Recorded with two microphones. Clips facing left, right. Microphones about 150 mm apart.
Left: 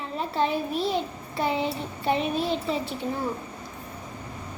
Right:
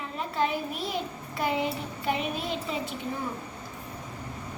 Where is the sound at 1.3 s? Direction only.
30° left (ahead or behind).